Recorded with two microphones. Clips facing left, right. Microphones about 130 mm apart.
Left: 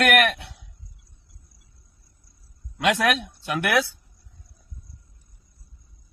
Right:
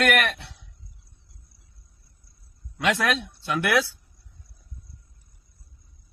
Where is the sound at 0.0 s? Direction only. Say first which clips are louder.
Left 3 dB; 45° left (ahead or behind).